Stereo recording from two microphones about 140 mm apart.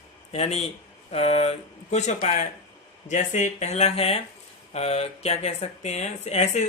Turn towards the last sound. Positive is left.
turn(degrees=55)  # may be behind; listen again after turning